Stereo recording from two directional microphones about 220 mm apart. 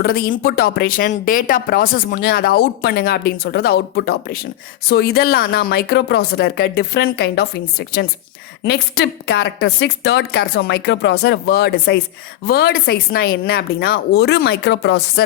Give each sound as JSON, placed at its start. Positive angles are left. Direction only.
{"t": 0.0, "sound": "speech", "side_deg": 40}